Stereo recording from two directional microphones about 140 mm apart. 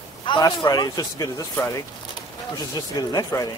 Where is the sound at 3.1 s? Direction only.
25° left (ahead or behind).